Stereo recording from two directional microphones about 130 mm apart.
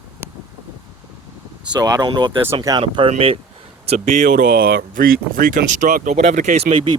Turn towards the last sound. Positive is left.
turn(degrees=-45)  # may be behind; listen again after turning